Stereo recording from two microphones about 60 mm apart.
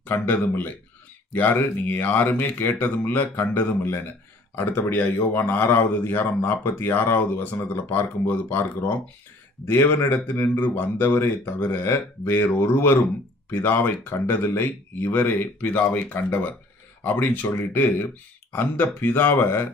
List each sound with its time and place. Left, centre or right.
0.0 s speech: left
9.7 s speech: left
10.0 s speech: left